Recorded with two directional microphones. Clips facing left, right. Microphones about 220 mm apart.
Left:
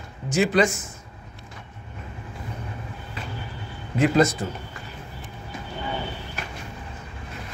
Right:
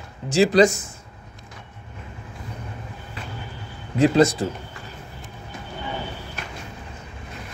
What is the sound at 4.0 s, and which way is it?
Speech, 35° right (ahead or behind).